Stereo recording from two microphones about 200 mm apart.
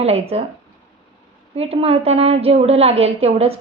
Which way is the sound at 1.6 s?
30° right (ahead or behind).